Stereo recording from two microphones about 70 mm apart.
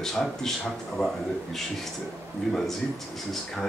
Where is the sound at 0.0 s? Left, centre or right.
Centre.